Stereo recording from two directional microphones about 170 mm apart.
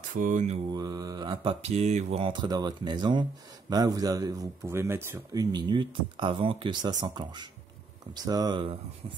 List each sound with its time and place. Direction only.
0.1 s mantra: 50° right (ahead or behind)
0.7 s speech: 25° right (ahead or behind)